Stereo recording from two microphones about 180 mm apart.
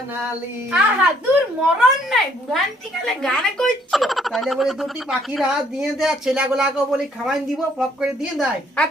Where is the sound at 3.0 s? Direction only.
5° left (ahead or behind).